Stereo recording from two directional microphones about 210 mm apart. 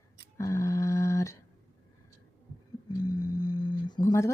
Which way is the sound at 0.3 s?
15° left (ahead or behind).